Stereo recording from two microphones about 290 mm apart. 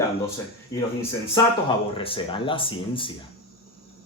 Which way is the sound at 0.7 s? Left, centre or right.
Centre.